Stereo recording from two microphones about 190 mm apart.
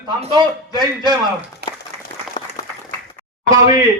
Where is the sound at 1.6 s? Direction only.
60° right (ahead or behind).